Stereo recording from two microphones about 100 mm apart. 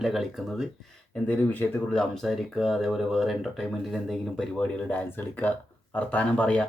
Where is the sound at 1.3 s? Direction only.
15° left (ahead or behind).